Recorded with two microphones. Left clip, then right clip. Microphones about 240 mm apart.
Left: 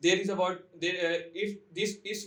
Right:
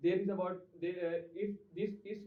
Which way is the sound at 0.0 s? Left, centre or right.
Left.